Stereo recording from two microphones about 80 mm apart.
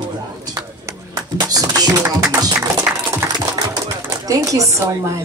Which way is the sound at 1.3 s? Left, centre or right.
Right.